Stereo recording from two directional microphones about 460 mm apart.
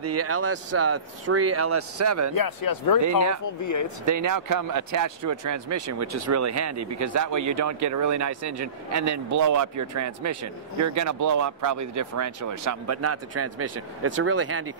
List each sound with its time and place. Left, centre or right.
0.0 s speech: right
2.3 s a man's voice: left
4.0 s speech: right